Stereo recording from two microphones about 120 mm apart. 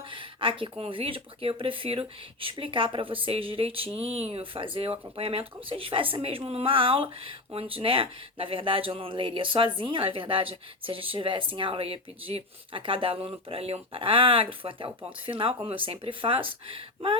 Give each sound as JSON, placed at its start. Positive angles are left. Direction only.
{"t": 0.1, "sound": "speech", "side_deg": -45}